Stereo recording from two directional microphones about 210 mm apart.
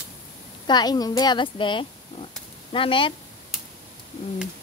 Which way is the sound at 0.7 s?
20° left (ahead or behind).